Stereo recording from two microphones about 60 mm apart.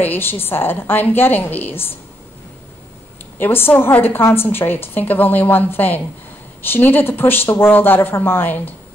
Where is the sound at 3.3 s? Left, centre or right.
Left.